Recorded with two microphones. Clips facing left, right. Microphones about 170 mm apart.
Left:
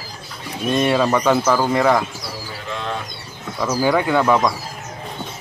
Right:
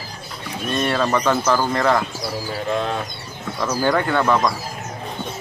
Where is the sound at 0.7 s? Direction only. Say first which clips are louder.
Left 3 dB; 15° left (ahead or behind).